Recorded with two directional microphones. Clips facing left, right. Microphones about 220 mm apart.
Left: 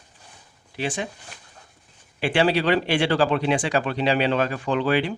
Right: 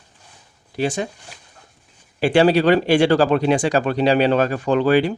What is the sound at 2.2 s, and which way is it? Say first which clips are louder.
Speech: right 6 dB; 40° right (ahead or behind).